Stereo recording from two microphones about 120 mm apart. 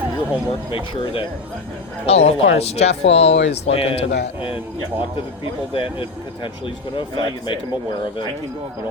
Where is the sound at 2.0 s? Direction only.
60° left (ahead or behind).